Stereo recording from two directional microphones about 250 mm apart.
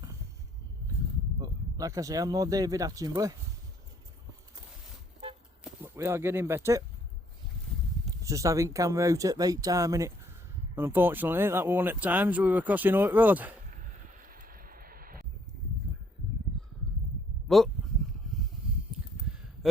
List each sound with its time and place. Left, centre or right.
1.4 s speech: centre
5.6 s speech: centre
8.2 s speech: centre
13.7 s a sound: right